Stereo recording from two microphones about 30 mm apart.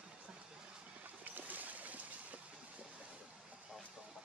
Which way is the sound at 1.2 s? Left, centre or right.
Right.